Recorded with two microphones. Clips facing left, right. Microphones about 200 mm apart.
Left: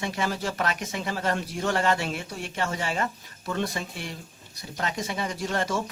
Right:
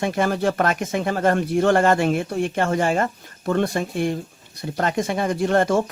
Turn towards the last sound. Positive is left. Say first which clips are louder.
# right 9 dB
turn(degrees=-55)  # may be behind; listen again after turning